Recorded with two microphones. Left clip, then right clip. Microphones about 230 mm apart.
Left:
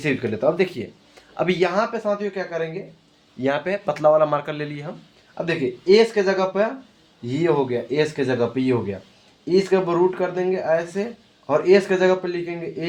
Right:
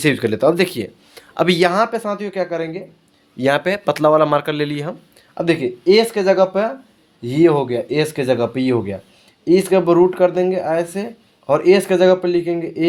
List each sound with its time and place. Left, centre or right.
0.0 s speech: right